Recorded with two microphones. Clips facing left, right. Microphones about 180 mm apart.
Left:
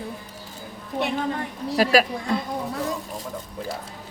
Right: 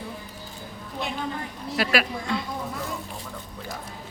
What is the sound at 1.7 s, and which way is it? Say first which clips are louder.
Speech: left 5 dB; 40° left (ahead or behind).